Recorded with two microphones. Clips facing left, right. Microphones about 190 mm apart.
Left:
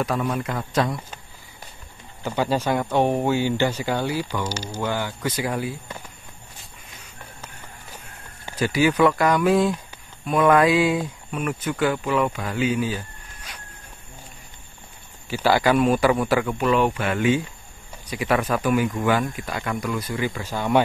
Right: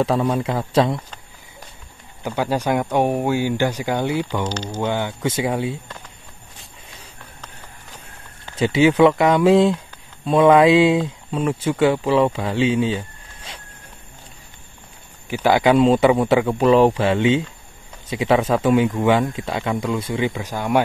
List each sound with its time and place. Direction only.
0.0 s speech: 25° right (ahead or behind)
2.2 s speech: 10° right (ahead or behind)
4.4 s speech: 10° left (ahead or behind)
4.8 s speech: 25° right (ahead or behind)
8.5 s speech: 25° right (ahead or behind)
15.2 s speech: 15° right (ahead or behind)